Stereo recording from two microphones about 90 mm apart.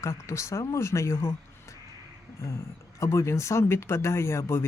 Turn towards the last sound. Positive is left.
turn(degrees=30)  # may be behind; listen again after turning